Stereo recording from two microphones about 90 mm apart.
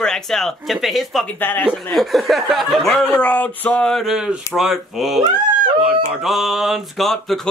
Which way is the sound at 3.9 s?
Centre (ahead or behind).